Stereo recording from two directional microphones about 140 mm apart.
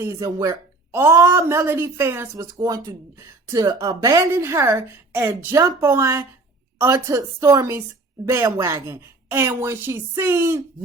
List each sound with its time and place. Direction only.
0.0 s speech: 20° right (ahead or behind)